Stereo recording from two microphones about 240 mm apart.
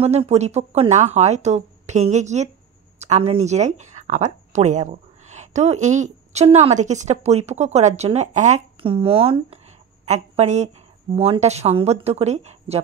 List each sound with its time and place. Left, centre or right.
0.0 s speech: right